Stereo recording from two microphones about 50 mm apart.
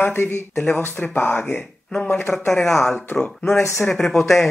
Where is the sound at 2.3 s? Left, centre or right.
Centre.